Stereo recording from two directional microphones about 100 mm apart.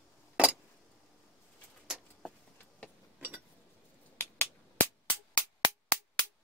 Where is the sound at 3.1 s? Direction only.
20° right (ahead or behind).